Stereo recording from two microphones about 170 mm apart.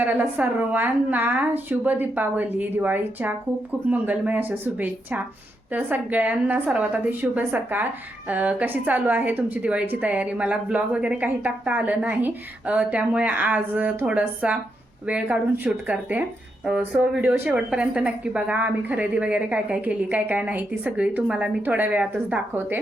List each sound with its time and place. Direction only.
0.0 s a woman's voice: 10° right (ahead or behind)